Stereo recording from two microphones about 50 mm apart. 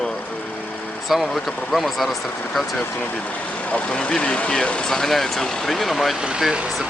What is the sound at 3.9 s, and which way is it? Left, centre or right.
Speech, left.